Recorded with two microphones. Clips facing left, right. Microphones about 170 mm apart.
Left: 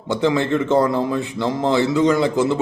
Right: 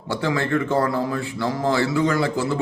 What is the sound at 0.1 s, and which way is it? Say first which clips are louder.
A man's voice: left 4 dB; 20° left (ahead or behind).